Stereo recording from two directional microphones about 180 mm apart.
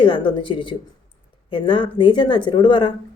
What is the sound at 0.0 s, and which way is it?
Speech, 25° left (ahead or behind).